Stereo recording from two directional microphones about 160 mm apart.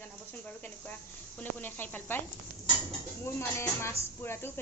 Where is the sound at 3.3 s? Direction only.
15° left (ahead or behind).